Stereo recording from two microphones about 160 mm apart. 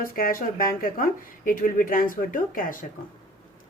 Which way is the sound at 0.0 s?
65° left (ahead or behind).